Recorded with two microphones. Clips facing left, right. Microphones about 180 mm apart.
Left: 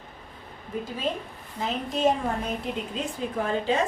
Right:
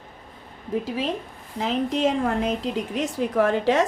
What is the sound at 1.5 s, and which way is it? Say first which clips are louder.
A woman's voice: right 5 dB; 90° right.